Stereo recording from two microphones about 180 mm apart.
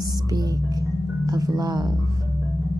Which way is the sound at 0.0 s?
20° right (ahead or behind).